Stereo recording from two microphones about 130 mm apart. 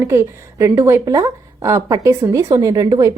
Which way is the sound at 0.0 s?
20° right (ahead or behind).